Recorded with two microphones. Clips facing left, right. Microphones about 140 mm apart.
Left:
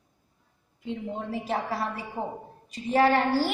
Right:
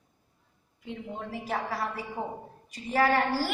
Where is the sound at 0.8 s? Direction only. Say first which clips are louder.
Left 5 dB; 25° left (ahead or behind).